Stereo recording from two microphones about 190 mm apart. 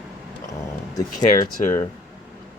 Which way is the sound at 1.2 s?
45° left (ahead or behind).